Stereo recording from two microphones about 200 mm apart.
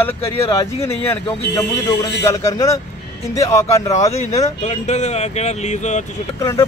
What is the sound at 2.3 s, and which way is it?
Speech, 15° left (ahead or behind).